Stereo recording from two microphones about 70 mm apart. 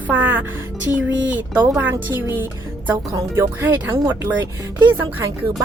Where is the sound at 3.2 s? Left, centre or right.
Right.